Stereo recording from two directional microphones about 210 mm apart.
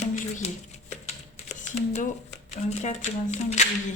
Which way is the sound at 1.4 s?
30° left (ahead or behind).